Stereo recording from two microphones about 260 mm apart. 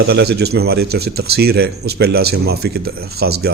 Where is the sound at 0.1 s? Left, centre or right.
Right.